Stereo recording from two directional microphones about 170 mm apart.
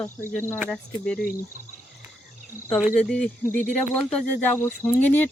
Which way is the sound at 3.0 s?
5° left (ahead or behind).